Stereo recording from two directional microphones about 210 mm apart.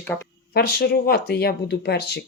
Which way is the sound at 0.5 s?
50° left (ahead or behind).